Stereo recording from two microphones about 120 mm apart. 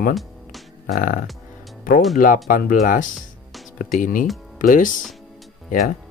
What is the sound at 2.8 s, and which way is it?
Speech, 90° left.